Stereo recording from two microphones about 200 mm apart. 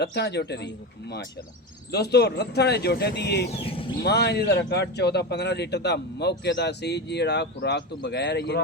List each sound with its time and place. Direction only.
0.0 s a man's voice: 55° left (ahead or behind)
1.9 s a man's voice: 55° left (ahead or behind)
3.6 s speech: 30° left (ahead or behind)
4.0 s a man's voice: 55° left (ahead or behind)